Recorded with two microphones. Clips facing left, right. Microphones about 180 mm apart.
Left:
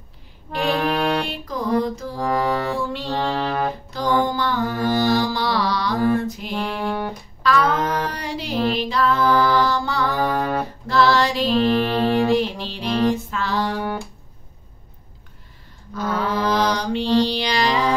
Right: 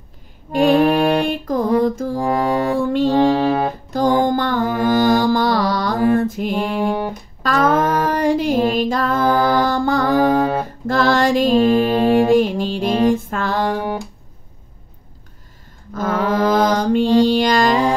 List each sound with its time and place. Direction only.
0.5 s music: 45° right (ahead or behind)
3.2 s music: 15° right (ahead or behind)
3.9 s mantra: 45° right (ahead or behind)
6.5 s music: 15° right (ahead or behind)
7.4 s a sound: 45° right (ahead or behind)
15.9 s mantra: 45° right (ahead or behind)